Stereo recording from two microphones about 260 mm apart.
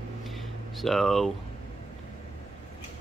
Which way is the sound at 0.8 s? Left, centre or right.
Centre.